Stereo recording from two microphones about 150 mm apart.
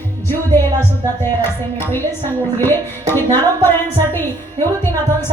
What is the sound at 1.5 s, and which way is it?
A woman's voice, 15° left (ahead or behind).